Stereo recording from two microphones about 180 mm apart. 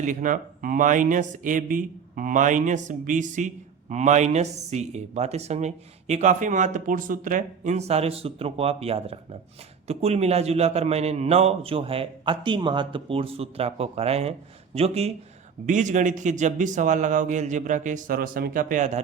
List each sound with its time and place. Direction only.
0.0 s a man's voice: 45° right (ahead or behind)